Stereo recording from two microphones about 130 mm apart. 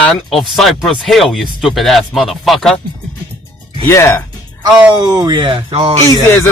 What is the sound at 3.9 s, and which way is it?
Speech, 20° left (ahead or behind).